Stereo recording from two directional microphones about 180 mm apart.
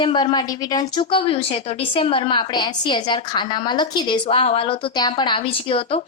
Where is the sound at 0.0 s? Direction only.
25° left (ahead or behind).